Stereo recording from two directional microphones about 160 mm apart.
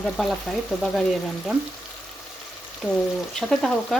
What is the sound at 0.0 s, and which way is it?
Speech, centre (ahead or behind).